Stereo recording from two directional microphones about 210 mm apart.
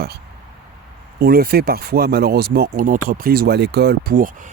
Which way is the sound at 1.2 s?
45° right (ahead or behind).